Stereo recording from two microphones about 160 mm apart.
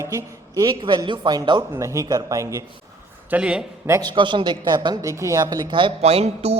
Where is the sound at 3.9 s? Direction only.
25° right (ahead or behind).